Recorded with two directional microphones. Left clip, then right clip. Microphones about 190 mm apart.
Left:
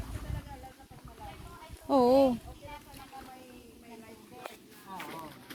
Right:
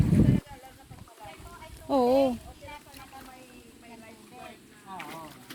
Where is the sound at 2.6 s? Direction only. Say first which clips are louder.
Right 5 dB; 40° right (ahead or behind).